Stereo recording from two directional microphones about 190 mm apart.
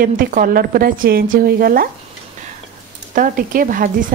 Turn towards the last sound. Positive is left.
turn(degrees=-45)  # may be behind; listen again after turning